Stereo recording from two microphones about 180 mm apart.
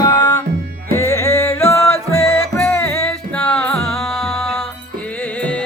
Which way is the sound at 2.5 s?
10° left (ahead or behind).